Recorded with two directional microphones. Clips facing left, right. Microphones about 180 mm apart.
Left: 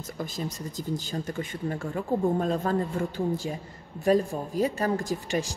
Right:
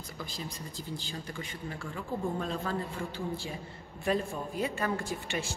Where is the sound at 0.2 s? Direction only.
45° left (ahead or behind).